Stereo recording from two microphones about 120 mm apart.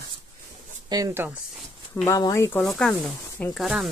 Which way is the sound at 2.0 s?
30° left (ahead or behind).